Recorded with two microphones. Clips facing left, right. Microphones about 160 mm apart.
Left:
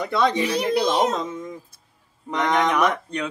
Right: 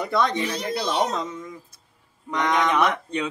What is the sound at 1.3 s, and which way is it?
Speech, 25° left (ahead or behind).